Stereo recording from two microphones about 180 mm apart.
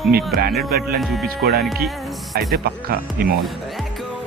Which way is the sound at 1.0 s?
Centre (ahead or behind).